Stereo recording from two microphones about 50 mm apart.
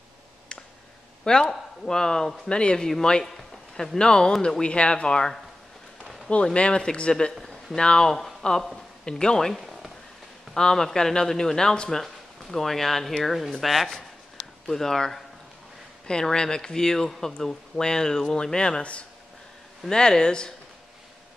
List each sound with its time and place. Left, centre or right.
1.2 s a man's voice: centre
8.1 s speech: centre
9.5 s a sound: centre
10.5 s speech: centre
12.0 s speech: centre